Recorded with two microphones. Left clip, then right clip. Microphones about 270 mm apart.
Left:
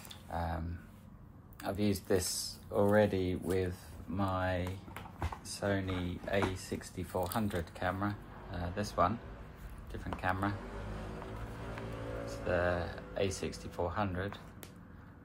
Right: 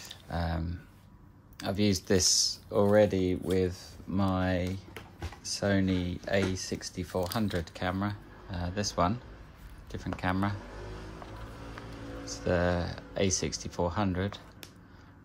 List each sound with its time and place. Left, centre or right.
0.3 s a sound: right
1.6 s speech: right
10.2 s speech: right
12.3 s speech: right